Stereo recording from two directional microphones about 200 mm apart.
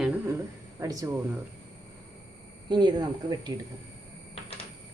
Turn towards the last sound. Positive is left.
turn(degrees=-20)  # may be behind; listen again after turning